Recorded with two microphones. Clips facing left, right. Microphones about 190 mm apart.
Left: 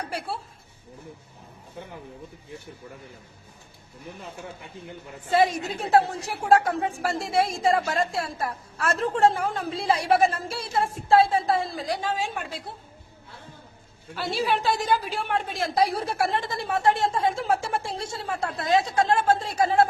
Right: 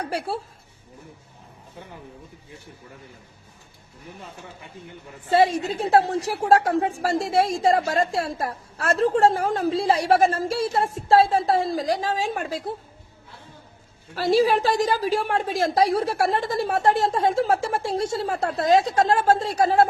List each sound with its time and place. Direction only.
5.3 s a woman's voice: 30° right (ahead or behind)
14.2 s a woman's voice: 40° right (ahead or behind)